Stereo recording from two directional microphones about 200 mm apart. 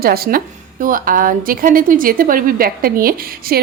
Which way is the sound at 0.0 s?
50° right (ahead or behind).